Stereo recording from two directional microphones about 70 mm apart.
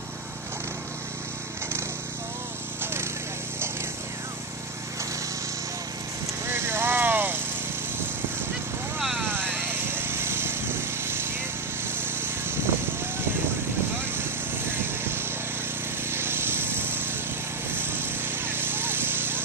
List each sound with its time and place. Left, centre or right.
2.8 s a sound: right
6.4 s vehicle: right
9.6 s vehicle: right
14.7 s vehicle: right
16.1 s a sound: right
17.7 s vehicle: right